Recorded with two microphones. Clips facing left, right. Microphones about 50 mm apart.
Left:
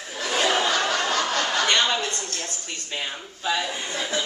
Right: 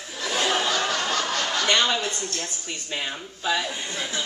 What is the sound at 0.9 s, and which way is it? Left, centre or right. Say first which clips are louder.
Snicker: left 2 dB; left.